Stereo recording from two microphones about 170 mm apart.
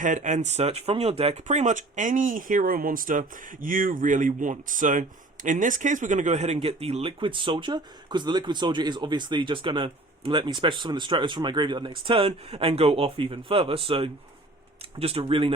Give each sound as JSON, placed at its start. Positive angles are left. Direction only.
{"t": 0.0, "sound": "speech", "side_deg": -45}